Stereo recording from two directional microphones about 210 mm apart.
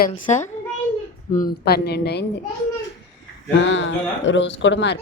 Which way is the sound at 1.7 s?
50° left (ahead or behind).